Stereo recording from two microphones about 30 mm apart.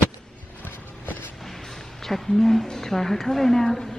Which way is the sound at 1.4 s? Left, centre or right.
Centre.